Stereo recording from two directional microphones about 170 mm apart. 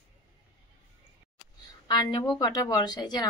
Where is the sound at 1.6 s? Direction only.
25° left (ahead or behind).